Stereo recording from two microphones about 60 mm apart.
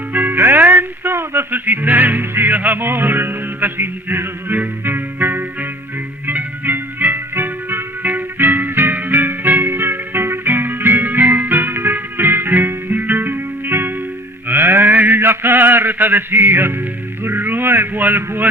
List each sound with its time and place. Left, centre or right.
0.1 s music: right
14.4 s mantra: right
17.2 s a man's voice: right